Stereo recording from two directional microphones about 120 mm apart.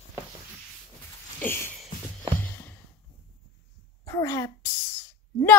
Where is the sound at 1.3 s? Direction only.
20° left (ahead or behind).